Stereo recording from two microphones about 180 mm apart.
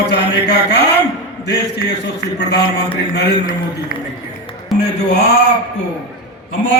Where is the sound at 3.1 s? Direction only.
50° left (ahead or behind).